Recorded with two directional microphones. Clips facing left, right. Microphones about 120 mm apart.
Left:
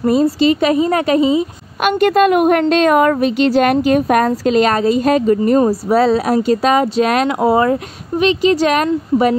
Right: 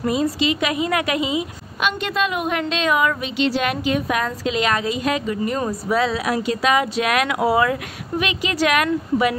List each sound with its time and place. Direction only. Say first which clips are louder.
0.0 s a woman's voice: left 8 dB; 40° left (ahead or behind)
1.8 s a woman's voice: left 10 dB; 55° left (ahead or behind); by 9.3 s 35° left (ahead or behind)